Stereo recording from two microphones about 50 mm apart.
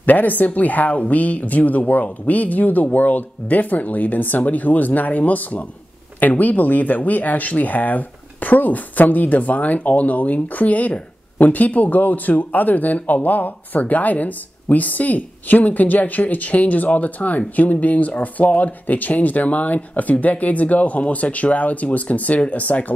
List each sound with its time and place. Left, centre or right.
0.0 s speech: left